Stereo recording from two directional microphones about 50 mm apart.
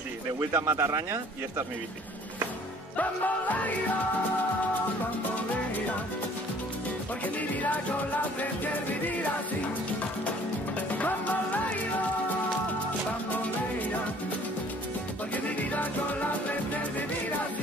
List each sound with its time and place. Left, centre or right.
0.5 s speech: right
3.0 s music: left
11.0 s music: left
15.3 s music: left